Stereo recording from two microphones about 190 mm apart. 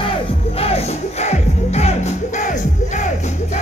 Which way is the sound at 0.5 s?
35° left (ahead or behind).